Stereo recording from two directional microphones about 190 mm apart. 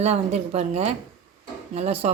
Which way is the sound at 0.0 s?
35° right (ahead or behind).